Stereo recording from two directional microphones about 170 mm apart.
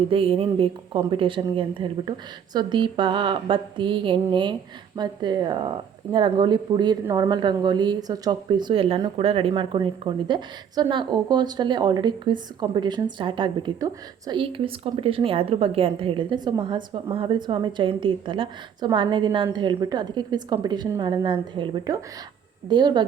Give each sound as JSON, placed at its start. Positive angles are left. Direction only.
{"t": 0.1, "sound": "a woman's voice", "side_deg": -35}